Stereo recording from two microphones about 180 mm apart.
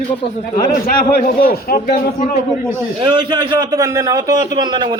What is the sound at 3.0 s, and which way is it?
A man's voice, 25° right (ahead or behind).